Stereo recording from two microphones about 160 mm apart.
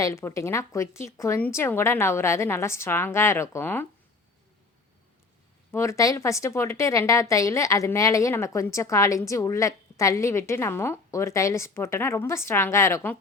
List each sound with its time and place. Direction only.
0.0 s speech: 15° left (ahead or behind)
5.7 s a woman's voice: 20° left (ahead or behind)